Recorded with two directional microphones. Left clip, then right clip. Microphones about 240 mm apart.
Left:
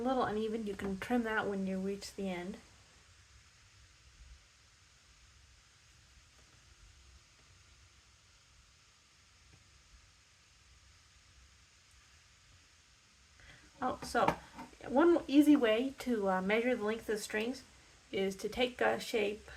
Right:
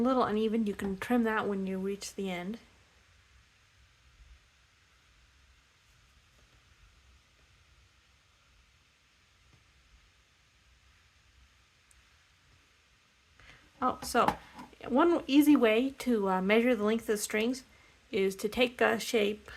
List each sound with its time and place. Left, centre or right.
0.0 s speech: right
13.7 s speech: right